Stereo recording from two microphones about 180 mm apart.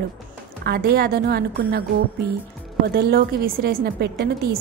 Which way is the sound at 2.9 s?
60° right (ahead or behind).